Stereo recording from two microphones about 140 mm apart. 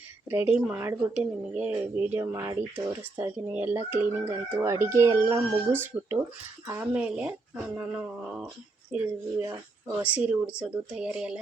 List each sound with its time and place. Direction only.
0.3 s speech: 15° right (ahead or behind)
2.2 s speech: 25° right (ahead or behind)
2.7 s speech: 15° right (ahead or behind)
9.4 s speech: 20° right (ahead or behind)
10.0 s speech: 10° right (ahead or behind)